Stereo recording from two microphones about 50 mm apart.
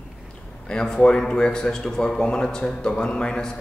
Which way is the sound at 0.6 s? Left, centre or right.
Centre.